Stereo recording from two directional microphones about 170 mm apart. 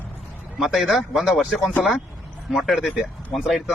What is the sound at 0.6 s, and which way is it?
Speech, centre (ahead or behind).